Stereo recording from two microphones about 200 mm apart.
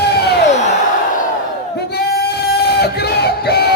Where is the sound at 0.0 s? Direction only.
55° left (ahead or behind).